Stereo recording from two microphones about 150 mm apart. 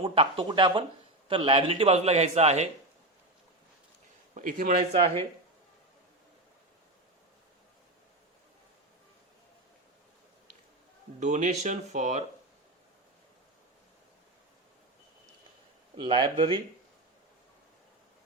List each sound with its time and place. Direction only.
0.0 s a man's voice: 35° right (ahead or behind)
4.4 s a man's voice: 65° right (ahead or behind)
11.2 s a man's voice: 55° right (ahead or behind)
16.0 s speech: 30° right (ahead or behind)